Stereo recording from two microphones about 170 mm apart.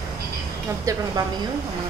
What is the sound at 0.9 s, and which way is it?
Speech, 20° right (ahead or behind).